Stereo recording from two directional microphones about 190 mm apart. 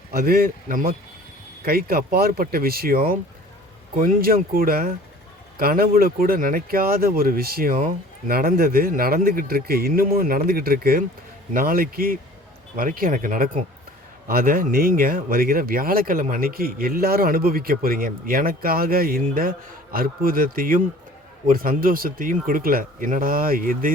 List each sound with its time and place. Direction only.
0.1 s speech: 50° right (ahead or behind)